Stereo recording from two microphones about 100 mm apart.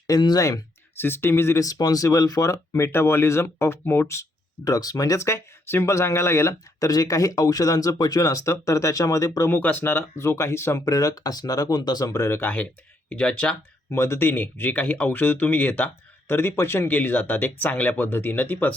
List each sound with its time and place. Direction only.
0.1 s speech: 40° left (ahead or behind)
0.9 s speech: 25° left (ahead or behind)
4.1 s speech: 35° left (ahead or behind)
9.5 s speech: 20° left (ahead or behind)
13.9 s speech: 25° left (ahead or behind)